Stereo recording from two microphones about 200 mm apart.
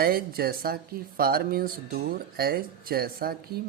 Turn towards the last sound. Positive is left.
turn(degrees=-50)  # may be behind; listen again after turning